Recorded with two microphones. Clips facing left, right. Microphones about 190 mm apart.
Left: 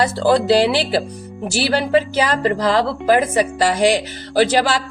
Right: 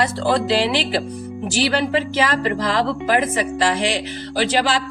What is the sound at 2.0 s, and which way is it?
Speech, 40° left (ahead or behind).